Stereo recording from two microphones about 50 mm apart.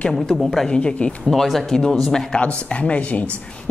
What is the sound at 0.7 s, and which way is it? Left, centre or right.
Speech, left.